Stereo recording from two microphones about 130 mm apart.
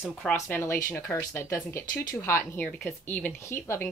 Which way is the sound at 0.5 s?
20° left (ahead or behind).